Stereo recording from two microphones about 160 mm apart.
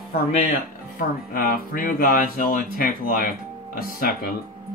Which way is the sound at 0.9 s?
65° left (ahead or behind).